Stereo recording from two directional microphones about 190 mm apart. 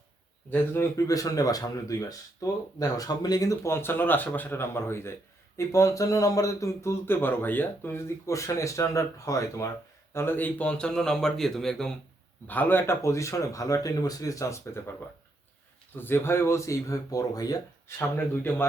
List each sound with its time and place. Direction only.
0.5 s speech: 15° left (ahead or behind)
16.0 s speech: 10° left (ahead or behind)